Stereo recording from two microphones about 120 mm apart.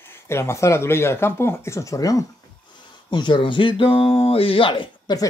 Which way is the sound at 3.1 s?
40° left (ahead or behind).